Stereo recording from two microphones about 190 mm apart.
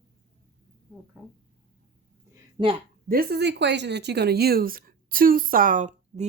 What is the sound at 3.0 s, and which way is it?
Speech, 55° right (ahead or behind).